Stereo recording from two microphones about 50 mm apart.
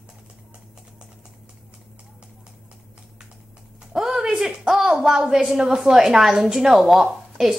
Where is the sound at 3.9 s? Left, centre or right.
Centre.